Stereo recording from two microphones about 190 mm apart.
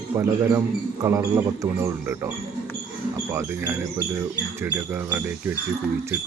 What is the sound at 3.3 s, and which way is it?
Speech, 15° right (ahead or behind).